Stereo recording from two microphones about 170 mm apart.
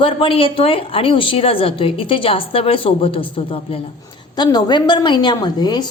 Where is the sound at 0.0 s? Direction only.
30° left (ahead or behind).